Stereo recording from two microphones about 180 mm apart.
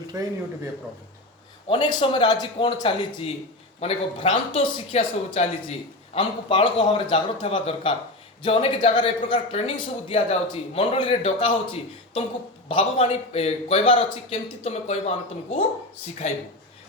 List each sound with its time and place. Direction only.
0.1 s speech: 20° right (ahead or behind)
1.6 s a man's voice: 25° left (ahead or behind)
16.2 s a man's voice: 40° left (ahead or behind)